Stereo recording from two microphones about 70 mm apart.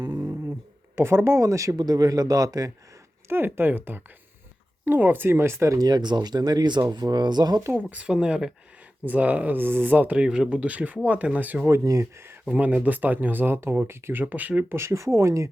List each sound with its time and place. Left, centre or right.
0.9 s speech: right
1.8 s a man's voice: right
3.2 s speech: right
5.7 s speech: right
7.7 s speech: right
8.0 s speech: centre
10.2 s speech: centre
11.7 s speech: right
12.5 s speech: right
14.8 s speech: right